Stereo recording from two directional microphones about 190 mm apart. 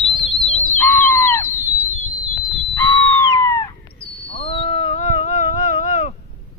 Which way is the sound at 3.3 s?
20° left (ahead or behind).